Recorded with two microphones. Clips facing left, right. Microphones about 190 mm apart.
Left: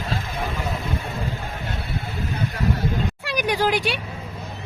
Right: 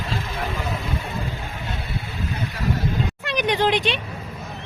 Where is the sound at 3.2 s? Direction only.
10° left (ahead or behind).